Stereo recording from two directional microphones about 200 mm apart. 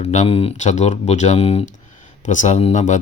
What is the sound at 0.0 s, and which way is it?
Speech, 35° left (ahead or behind).